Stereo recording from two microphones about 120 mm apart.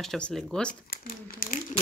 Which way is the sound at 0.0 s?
5° left (ahead or behind).